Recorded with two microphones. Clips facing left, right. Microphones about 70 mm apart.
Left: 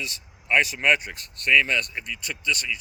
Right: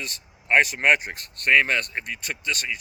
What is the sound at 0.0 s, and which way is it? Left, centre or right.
Speech, right.